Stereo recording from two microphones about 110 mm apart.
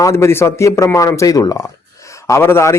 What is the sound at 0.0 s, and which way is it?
A man's voice, 25° left (ahead or behind).